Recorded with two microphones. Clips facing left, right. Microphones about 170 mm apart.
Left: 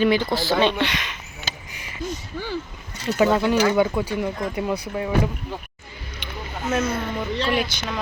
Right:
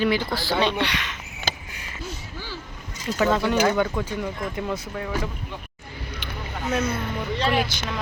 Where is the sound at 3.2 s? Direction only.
10° left (ahead or behind).